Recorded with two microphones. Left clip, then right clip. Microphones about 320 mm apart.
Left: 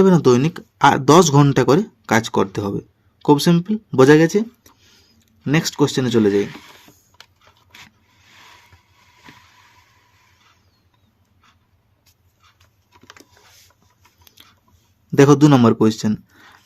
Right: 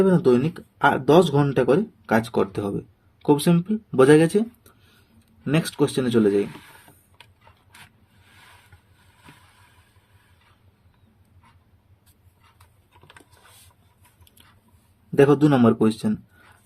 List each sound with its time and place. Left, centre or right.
0.0 s speech: left
15.1 s speech: left